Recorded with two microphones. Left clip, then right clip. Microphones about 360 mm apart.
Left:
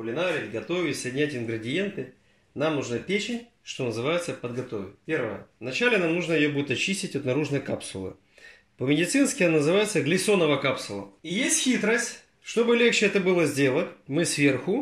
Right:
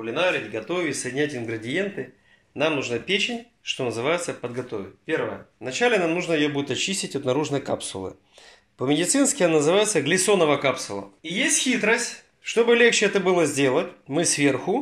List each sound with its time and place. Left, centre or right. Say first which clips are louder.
0.1 s speech: right 4 dB; right